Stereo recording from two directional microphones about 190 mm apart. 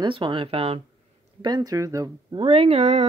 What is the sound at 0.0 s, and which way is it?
Speech, 25° right (ahead or behind).